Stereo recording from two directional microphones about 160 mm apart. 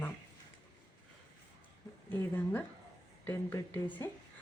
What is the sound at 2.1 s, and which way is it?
Speech, 15° left (ahead or behind).